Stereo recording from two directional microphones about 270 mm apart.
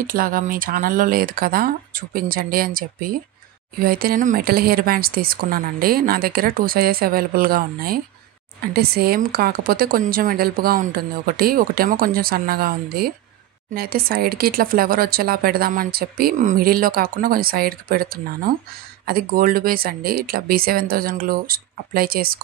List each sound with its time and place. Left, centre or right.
0.0 s speech: right